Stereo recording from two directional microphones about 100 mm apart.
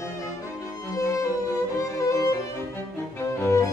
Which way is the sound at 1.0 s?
35° left (ahead or behind).